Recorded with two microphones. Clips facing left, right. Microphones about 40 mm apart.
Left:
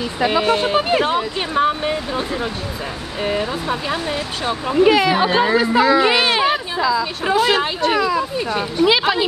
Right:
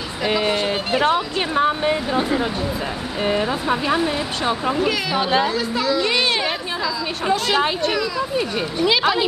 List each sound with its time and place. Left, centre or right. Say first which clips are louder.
0.4 s speech: left 4 dB; centre
0.7 s speech: left 5 dB; centre
1.0 s speech: right 1 dB; centre
4.7 s speech: left 7 dB; left
7.9 s speech: left 5 dB; left
8.4 s speech: left 2 dB; centre
8.8 s speech: left 2 dB; centre